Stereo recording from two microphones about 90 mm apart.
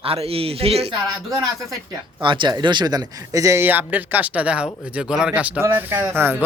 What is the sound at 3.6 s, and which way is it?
Speech, 20° right (ahead or behind).